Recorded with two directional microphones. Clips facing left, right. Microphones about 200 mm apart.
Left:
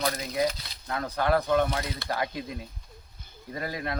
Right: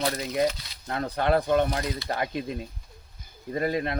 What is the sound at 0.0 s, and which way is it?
Speech, 35° right (ahead or behind).